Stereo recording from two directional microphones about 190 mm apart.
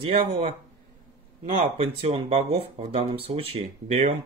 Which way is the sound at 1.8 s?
30° right (ahead or behind).